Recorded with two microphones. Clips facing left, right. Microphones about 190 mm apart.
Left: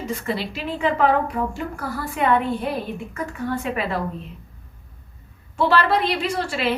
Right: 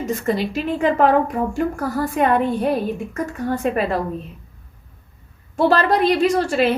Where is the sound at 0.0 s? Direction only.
45° right (ahead or behind).